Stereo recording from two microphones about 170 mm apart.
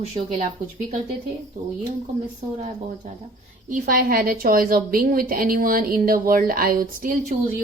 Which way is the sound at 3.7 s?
55° right (ahead or behind).